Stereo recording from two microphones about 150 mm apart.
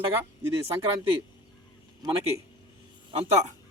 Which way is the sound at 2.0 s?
35° right (ahead or behind).